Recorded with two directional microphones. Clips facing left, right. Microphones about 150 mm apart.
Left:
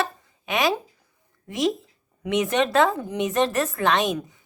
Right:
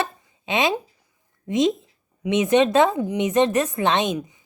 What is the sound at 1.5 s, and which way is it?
A woman's voice, 20° right (ahead or behind).